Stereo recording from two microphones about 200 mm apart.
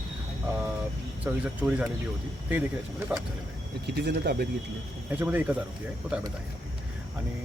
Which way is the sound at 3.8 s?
55° right (ahead or behind).